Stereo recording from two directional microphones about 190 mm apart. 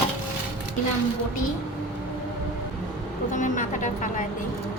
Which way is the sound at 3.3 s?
40° left (ahead or behind).